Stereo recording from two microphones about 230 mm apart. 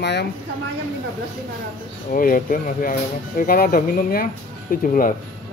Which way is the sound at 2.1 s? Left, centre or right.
Left.